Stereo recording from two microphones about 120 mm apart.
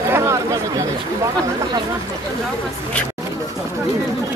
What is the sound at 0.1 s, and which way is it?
Speech, 25° right (ahead or behind).